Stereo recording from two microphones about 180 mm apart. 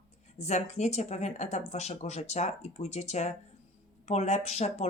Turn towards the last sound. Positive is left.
turn(degrees=35)  # may be behind; listen again after turning